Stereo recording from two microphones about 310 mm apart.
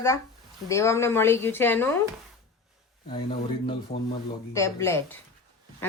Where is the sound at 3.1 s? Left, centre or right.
Centre.